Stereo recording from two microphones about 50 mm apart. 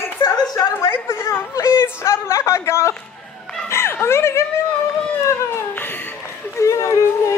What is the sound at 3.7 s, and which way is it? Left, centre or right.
Music, left.